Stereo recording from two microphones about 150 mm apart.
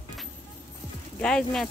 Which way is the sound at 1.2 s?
5° left (ahead or behind).